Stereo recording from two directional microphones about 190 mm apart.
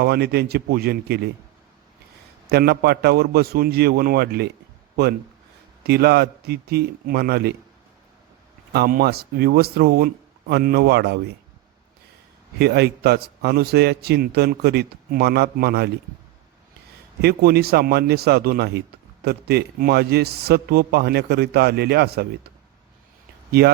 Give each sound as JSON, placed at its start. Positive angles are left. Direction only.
{"t": 0.0, "sound": "a man's voice", "side_deg": -55}
{"t": 2.5, "sound": "a man's voice", "side_deg": -55}
{"t": 5.8, "sound": "a man's voice", "side_deg": -55}
{"t": 8.7, "sound": "a man's voice", "side_deg": -55}
{"t": 12.5, "sound": "a man's voice", "side_deg": -60}
{"t": 17.2, "sound": "a man's voice", "side_deg": -55}